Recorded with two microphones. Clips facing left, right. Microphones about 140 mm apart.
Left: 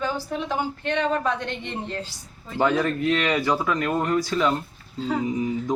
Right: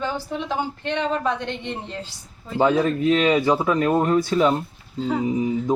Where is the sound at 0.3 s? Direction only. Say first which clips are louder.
Even; 20° right (ahead or behind).